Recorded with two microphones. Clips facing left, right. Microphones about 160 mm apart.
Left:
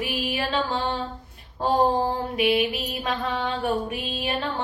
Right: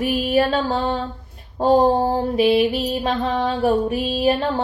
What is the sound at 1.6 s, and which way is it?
Mantra, 40° right (ahead or behind).